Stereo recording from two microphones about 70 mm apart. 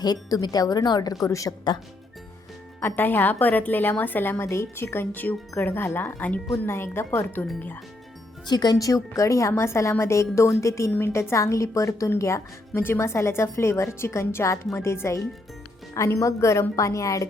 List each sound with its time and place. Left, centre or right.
0.0 s speech: left
1.2 s a woman's voice: left
2.8 s a woman's voice: left
6.7 s a woman's voice: left
8.4 s a woman's voice: left